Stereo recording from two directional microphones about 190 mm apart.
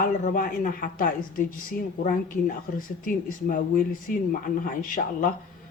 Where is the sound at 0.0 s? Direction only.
45° left (ahead or behind).